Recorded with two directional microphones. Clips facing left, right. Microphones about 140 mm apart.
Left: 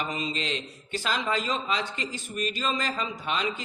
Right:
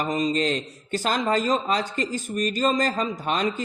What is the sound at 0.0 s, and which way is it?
A man's voice, 40° right (ahead or behind).